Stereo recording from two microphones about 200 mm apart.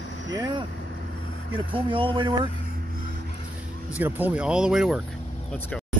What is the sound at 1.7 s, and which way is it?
Speech, 25° right (ahead or behind).